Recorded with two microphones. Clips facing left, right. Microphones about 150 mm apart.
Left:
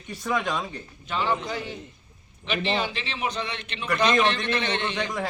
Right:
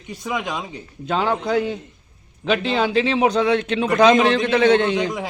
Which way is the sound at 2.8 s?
90° right.